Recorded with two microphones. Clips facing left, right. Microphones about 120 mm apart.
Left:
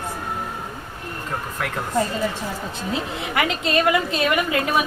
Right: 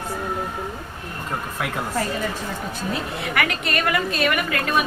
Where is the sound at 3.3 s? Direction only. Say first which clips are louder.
Left 4 dB; 20° left (ahead or behind).